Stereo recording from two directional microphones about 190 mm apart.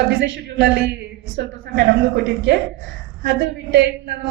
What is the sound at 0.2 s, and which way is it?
A woman's voice, 60° right (ahead or behind).